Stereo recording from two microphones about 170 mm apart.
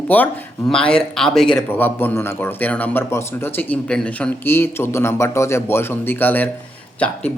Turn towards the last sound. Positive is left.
turn(degrees=10)  # may be behind; listen again after turning